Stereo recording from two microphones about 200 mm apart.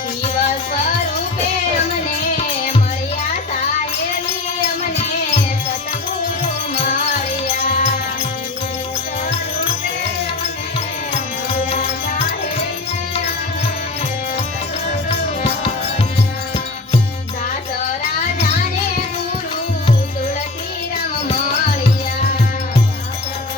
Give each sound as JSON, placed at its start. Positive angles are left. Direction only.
{"t": 0.4, "sound": "music", "side_deg": 35}
{"t": 6.8, "sound": "music", "side_deg": 35}
{"t": 11.5, "sound": "music", "side_deg": 35}